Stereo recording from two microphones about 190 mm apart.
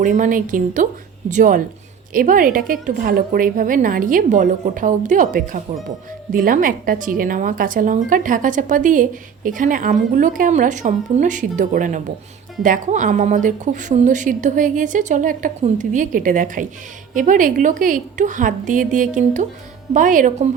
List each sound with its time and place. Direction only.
0.0 s a woman's voice: 45° right (ahead or behind)